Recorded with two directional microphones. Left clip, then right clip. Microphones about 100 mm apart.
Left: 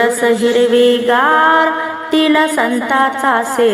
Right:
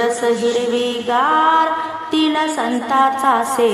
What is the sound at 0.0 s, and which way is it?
A woman's voice, 30° left (ahead or behind).